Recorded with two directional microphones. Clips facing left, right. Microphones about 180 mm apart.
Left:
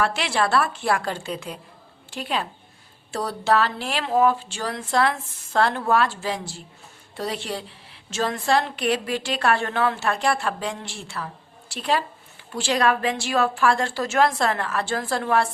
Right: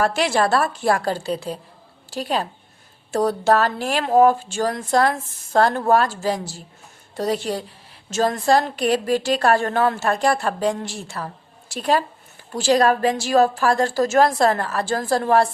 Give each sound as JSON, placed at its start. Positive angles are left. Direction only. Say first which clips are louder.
{"t": 0.0, "sound": "a woman's voice", "louder": "right 4 dB", "side_deg": -45}